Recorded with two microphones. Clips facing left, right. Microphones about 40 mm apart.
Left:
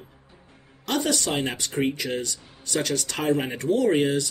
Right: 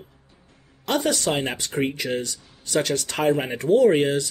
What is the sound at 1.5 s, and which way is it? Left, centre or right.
Speech, right.